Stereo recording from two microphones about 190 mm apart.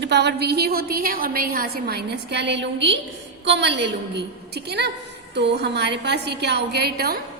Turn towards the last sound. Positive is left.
turn(degrees=-55)  # may be behind; listen again after turning